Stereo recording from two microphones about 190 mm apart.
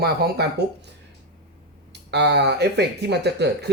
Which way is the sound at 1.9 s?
60° right (ahead or behind).